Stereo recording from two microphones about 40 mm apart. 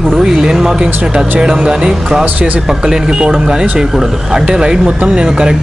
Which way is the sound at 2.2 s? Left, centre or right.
Right.